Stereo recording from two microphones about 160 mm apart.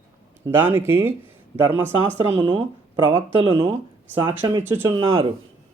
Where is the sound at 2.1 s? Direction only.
45° right (ahead or behind).